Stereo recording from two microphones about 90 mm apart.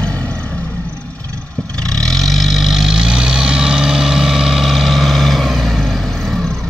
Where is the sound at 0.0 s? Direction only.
15° left (ahead or behind).